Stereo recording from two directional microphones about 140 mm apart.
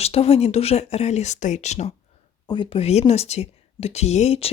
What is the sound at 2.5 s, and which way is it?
Speech, 40° left (ahead or behind).